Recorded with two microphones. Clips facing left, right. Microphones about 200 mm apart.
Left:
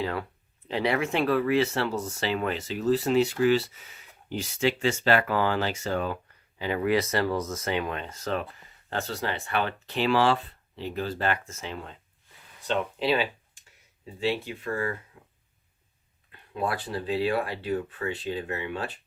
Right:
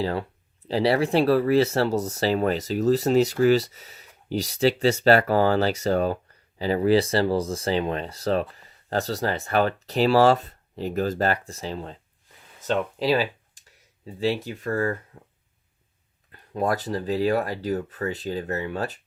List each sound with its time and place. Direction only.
0.0 s speech: 30° right (ahead or behind)
16.3 s speech: 40° right (ahead or behind)